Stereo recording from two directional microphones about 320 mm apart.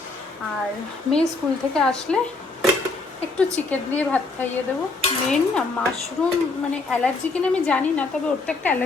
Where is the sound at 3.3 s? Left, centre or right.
Centre.